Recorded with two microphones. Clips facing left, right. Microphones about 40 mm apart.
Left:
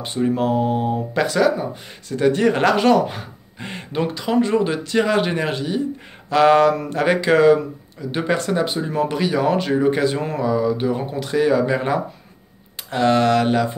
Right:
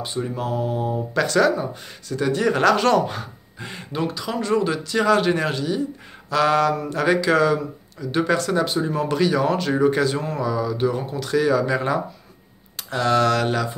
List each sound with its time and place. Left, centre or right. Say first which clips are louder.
0.0 s speech: left 6 dB; left
1.1 s speech: even; centre
2.0 s speech: left 4 dB; left
2.8 s speech: left 3 dB; centre
3.6 s speech: left 3 dB; left
8.1 s speech: even; centre
10.4 s speech: left 3 dB; centre